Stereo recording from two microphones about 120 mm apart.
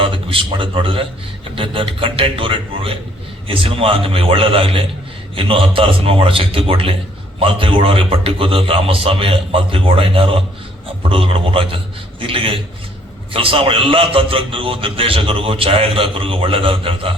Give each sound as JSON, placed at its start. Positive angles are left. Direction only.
{"t": 0.0, "sound": "a man's voice", "side_deg": -50}